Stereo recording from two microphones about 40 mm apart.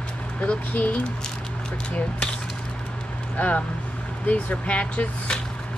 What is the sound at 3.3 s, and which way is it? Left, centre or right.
Speech, left.